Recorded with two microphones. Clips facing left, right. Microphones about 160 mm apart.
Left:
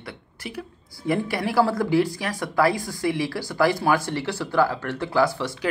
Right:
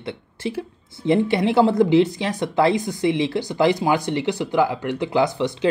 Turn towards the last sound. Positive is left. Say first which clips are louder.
# right 3 dB
turn(degrees=-20)  # may be behind; listen again after turning